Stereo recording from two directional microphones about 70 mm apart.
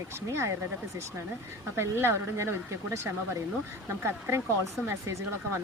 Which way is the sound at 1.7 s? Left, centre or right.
Right.